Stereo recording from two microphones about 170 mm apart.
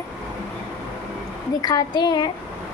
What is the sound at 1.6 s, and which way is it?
Speech, 25° left (ahead or behind).